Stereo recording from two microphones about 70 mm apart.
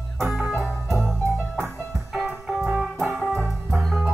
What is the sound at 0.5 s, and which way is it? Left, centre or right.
Music, centre.